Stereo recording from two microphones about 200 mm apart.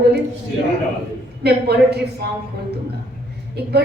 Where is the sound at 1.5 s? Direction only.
55° right (ahead or behind).